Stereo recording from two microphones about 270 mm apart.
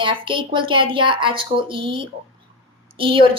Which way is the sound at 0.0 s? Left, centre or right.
Centre.